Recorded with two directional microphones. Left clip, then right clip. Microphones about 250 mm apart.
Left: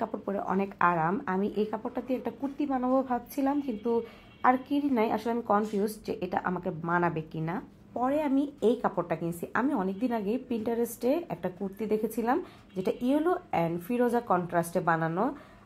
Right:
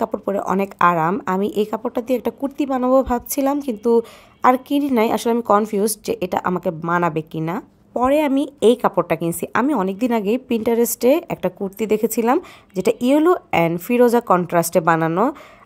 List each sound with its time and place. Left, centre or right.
0.0 s a woman's voice: right